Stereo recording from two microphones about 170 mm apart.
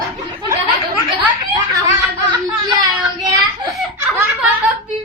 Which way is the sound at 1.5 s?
25° right (ahead or behind).